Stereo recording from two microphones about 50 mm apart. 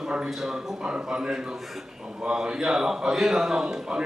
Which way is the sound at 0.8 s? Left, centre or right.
Centre.